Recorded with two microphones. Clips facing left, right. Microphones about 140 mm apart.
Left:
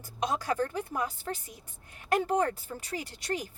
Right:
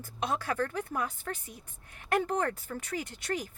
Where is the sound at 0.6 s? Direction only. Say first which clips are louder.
Left 1 dB; 35° left (ahead or behind).